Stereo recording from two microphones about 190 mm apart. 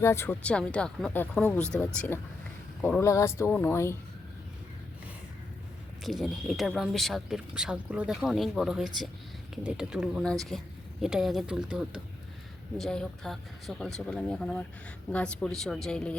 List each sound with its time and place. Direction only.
0.0 s speech: 15° left (ahead or behind)
2.8 s speech: 10° left (ahead or behind)
6.0 s speech: centre (ahead or behind)